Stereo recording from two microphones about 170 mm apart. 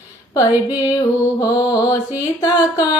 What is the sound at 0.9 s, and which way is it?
Music, 20° left (ahead or behind).